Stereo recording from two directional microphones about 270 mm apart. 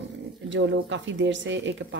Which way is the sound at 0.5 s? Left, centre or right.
Right.